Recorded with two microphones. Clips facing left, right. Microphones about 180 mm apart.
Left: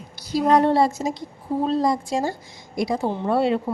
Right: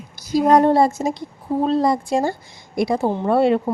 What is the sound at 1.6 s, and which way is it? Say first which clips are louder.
A woman's voice: right 3 dB; 65° right (ahead or behind).